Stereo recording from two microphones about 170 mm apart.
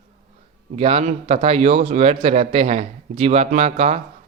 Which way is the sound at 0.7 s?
35° right (ahead or behind).